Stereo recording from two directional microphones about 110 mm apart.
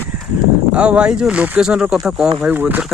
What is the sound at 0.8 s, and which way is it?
Speech, 10° right (ahead or behind).